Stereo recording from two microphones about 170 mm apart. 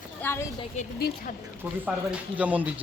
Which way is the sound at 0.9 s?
65° left (ahead or behind).